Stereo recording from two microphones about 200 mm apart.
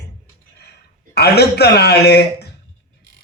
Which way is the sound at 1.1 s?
55° left (ahead or behind).